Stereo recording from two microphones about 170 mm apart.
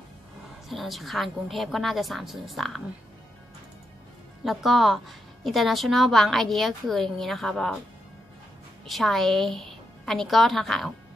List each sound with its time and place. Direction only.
0.7 s a woman's voice: centre (ahead or behind)
4.5 s a woman's voice: centre (ahead or behind)
8.8 s a woman's voice: centre (ahead or behind)